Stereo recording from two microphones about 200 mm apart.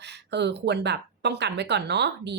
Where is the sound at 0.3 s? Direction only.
60° right (ahead or behind).